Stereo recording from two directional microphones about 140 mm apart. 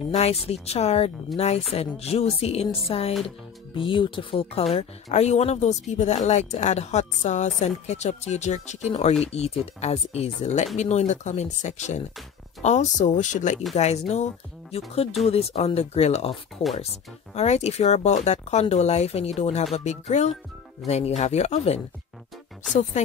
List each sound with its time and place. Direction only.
0.1 s speech: 50° left (ahead or behind)
13.7 s speech: 50° left (ahead or behind)